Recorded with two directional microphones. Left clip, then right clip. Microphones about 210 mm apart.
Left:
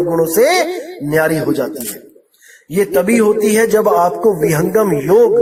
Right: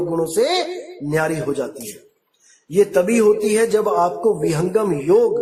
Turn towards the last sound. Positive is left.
turn(degrees=25)  # may be behind; listen again after turning